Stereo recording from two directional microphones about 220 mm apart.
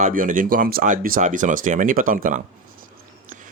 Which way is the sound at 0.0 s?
35° right (ahead or behind).